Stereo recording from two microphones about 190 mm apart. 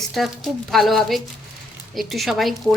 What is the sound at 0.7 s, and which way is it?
A woman's voice, centre (ahead or behind).